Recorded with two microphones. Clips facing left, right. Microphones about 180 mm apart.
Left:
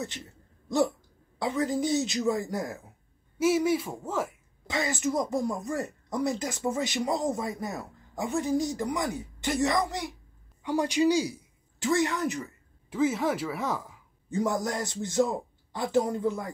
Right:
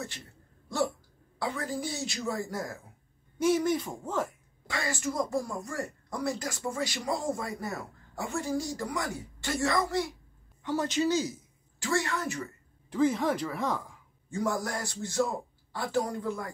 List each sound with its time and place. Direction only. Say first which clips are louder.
1.4 s speech: left 6 dB; 20° left (ahead or behind)
3.3 s speech: left 2 dB; 5° left (ahead or behind)
4.6 s speech: left 4 dB; 20° left (ahead or behind)
12.9 s speech: even; 5° left (ahead or behind)
14.3 s speech: left 3 dB; 20° left (ahead or behind)